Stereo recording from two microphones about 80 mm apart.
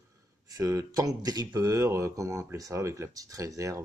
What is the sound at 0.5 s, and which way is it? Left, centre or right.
Speech, right.